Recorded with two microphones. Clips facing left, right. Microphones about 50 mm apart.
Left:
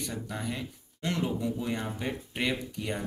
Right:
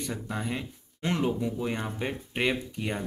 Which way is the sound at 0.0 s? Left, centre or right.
Right.